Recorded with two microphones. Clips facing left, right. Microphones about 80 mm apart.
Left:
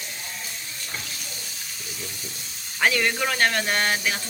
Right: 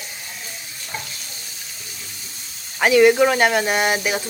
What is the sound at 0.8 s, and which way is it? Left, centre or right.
Water tap, centre.